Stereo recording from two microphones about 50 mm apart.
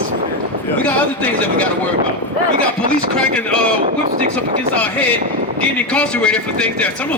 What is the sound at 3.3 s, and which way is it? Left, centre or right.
Speech, left.